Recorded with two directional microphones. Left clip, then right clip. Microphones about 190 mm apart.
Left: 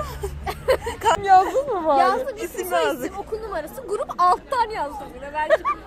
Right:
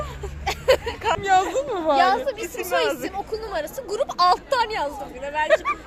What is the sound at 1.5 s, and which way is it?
Speech, 20° left (ahead or behind).